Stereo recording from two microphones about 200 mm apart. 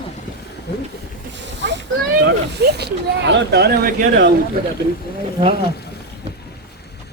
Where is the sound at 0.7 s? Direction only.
60° left (ahead or behind).